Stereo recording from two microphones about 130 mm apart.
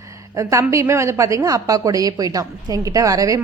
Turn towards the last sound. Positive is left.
turn(degrees=-25)  # may be behind; listen again after turning